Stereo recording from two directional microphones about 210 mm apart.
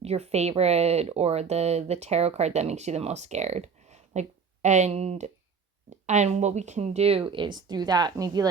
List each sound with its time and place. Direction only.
0.0 s speech: 30° right (ahead or behind)